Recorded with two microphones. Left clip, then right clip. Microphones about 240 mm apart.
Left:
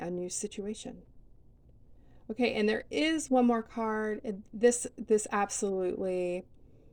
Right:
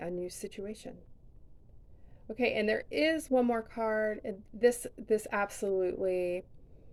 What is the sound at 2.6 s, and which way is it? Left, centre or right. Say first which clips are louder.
A woman's voice: even; centre.